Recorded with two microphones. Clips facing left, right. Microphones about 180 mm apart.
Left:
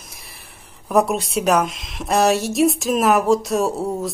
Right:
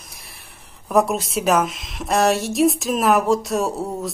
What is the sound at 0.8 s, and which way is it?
A woman's voice, centre (ahead or behind).